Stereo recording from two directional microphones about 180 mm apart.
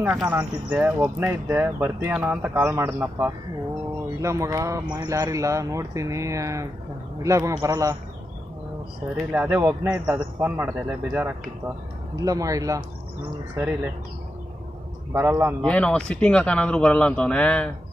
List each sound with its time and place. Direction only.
0.0 s speech: 10° right (ahead or behind)
9.3 s a man's voice: 10° right (ahead or behind)
15.1 s speech: 10° right (ahead or behind)
15.6 s a man's voice: 5° left (ahead or behind)